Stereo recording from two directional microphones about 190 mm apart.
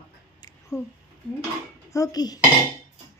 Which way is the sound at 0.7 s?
15° left (ahead or behind).